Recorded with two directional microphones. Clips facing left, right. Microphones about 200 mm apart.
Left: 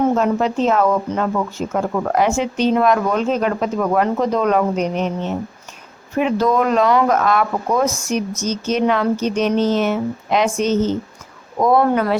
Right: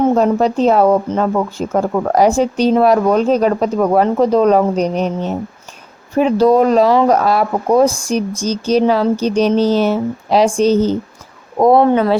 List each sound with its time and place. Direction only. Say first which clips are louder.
0.1 s speech: right 4 dB; 35° right (ahead or behind)